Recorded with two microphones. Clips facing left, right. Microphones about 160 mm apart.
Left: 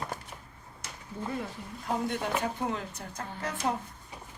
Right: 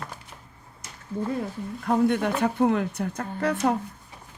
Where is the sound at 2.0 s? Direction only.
65° right (ahead or behind).